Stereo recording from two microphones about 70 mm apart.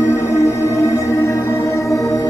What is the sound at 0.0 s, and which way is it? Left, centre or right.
Music, left.